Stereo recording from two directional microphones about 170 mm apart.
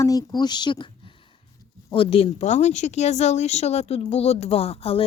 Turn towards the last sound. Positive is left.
turn(degrees=35)  # may be behind; listen again after turning